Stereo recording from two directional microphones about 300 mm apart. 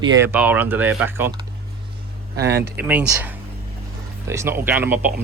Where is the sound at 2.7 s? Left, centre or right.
Centre.